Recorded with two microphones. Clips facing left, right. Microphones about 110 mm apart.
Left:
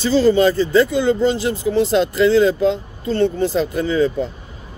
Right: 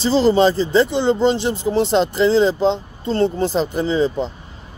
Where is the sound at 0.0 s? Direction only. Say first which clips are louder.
Even; 30° right (ahead or behind).